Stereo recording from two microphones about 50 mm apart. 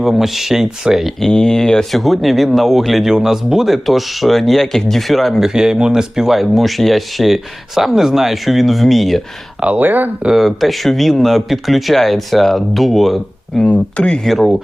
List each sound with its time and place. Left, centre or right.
0.0 s speech: centre
1.2 s speech: centre
1.9 s speech: centre
5.4 s speech: centre
9.7 s speech: right
10.2 s speech: centre
13.7 s speech: left
14.3 s speech: centre